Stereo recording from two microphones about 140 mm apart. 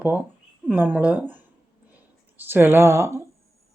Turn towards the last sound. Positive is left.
turn(degrees=-20)  # may be behind; listen again after turning